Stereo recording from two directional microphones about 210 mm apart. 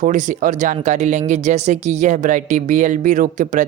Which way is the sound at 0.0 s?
40° right (ahead or behind).